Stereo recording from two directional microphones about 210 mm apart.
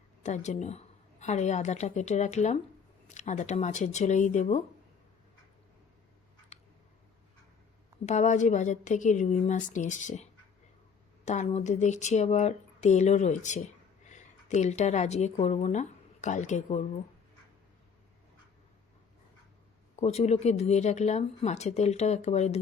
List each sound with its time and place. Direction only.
0.2 s speech: 35° left (ahead or behind)
8.0 s speech: 35° left (ahead or behind)
11.3 s speech: 35° left (ahead or behind)
20.0 s speech: 30° left (ahead or behind)